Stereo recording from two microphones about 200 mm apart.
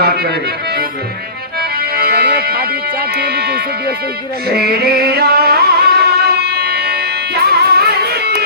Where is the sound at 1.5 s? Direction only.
50° right (ahead or behind).